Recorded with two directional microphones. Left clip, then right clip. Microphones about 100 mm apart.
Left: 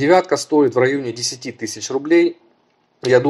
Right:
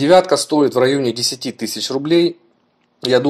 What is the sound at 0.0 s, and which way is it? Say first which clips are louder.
Speech: right 3 dB; 35° right (ahead or behind).